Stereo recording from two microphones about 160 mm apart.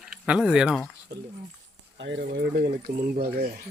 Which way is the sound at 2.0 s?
90° right.